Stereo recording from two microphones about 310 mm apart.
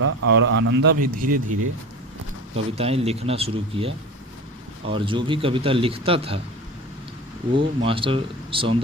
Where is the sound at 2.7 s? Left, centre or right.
Centre.